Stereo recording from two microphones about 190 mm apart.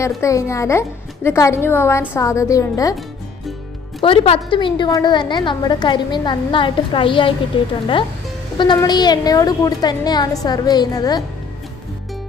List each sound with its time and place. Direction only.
0.2 s a woman's voice: 15° left (ahead or behind)
4.0 s a woman's voice: 30° left (ahead or behind)